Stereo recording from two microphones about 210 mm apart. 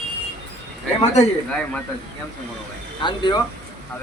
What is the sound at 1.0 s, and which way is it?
Speech, 30° left (ahead or behind).